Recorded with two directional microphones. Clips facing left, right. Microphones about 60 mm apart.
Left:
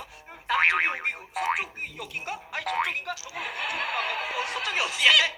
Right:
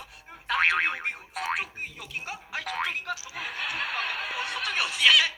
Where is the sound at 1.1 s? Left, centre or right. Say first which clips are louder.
Left 3 dB; centre.